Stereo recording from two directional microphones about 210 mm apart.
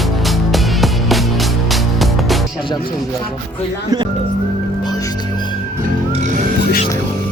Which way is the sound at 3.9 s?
20° right (ahead or behind).